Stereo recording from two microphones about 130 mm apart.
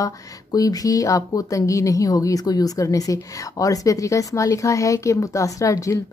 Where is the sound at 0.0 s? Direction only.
25° left (ahead or behind).